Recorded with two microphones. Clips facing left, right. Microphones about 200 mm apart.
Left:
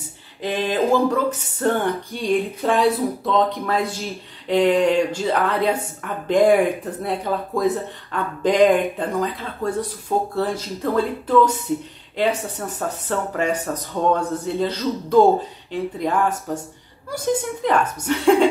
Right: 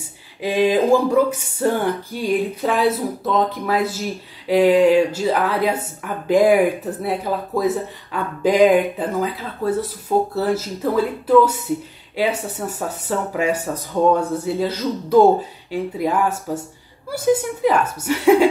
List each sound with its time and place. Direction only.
0.4 s speech: 10° right (ahead or behind)